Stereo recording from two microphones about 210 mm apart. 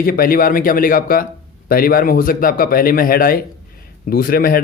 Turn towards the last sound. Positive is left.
turn(degrees=45)  # may be behind; listen again after turning